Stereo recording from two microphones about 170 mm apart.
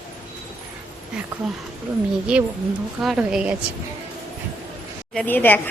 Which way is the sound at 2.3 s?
5° right (ahead or behind).